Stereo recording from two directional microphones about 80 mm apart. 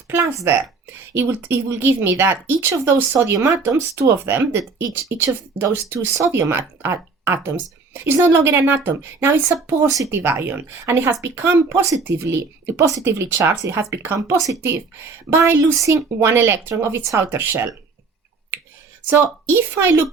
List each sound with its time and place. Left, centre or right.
0.3 s speech: right
14.2 s speech: right
14.6 s speech: right
19.1 s speech: right